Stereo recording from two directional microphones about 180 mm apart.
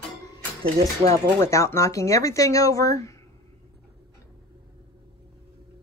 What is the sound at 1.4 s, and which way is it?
Speech, 15° left (ahead or behind).